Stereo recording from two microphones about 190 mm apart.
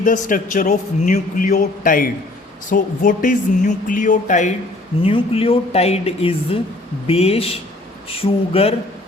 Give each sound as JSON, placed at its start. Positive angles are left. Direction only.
{"t": 0.0, "sound": "a man's voice", "side_deg": 40}